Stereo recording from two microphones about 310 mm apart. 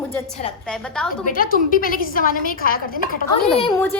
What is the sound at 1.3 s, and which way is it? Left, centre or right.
A woman's voice, left.